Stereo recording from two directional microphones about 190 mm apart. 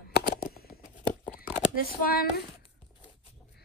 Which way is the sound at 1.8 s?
50° left (ahead or behind).